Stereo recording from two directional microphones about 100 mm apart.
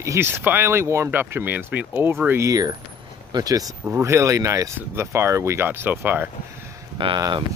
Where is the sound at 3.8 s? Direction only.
25° right (ahead or behind).